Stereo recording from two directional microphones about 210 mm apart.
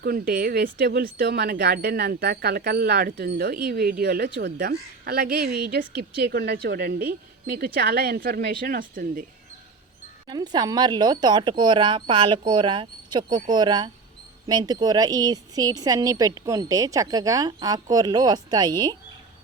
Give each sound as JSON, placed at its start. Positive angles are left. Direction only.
{"t": 0.0, "sound": "speech", "side_deg": -45}
{"t": 10.2, "sound": "a woman's voice", "side_deg": -20}